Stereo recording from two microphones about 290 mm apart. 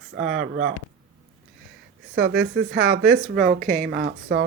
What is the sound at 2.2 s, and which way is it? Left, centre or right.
Speech, right.